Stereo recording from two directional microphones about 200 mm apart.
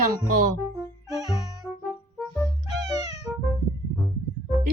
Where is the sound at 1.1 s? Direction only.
Centre (ahead or behind).